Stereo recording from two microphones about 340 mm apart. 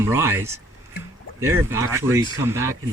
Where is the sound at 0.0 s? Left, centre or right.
Centre.